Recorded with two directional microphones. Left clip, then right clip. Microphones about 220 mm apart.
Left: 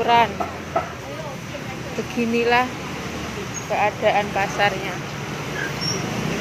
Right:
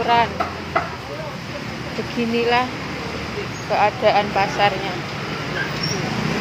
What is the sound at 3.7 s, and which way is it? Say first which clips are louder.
Speech: right 3 dB; centre (ahead or behind).